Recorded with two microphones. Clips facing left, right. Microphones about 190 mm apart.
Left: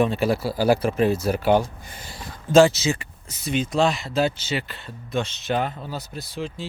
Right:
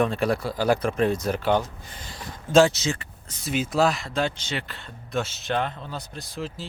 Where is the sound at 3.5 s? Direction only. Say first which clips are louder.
Left 1 dB; 5° right (ahead or behind).